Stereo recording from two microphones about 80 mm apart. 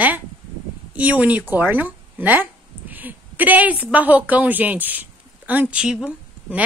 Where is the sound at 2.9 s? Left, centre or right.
Right.